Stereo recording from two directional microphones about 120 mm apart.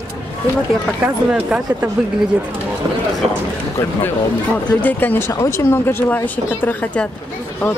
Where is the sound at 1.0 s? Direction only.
10° right (ahead or behind).